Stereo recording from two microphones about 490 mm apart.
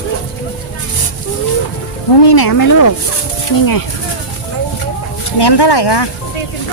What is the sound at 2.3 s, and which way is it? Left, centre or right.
Speech, left.